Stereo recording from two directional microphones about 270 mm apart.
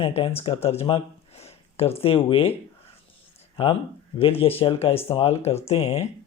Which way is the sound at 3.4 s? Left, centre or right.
Centre.